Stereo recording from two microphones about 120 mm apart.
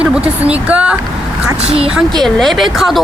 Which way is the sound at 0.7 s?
10° right (ahead or behind).